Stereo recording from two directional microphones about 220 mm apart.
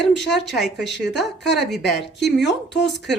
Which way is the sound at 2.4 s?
50° left (ahead or behind).